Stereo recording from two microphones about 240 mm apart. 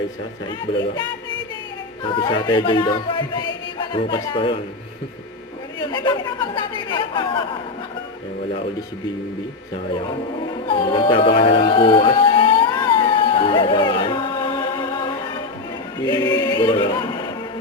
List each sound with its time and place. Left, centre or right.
2.0 s speech: left
5.9 s speech: centre
10.7 s a sound: left